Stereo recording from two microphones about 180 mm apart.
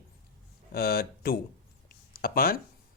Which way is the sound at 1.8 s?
55° left (ahead or behind).